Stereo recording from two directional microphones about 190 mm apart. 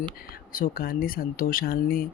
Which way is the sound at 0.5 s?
50° left (ahead or behind).